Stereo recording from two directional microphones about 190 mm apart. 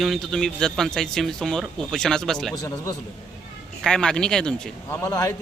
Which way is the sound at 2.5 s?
20° left (ahead or behind).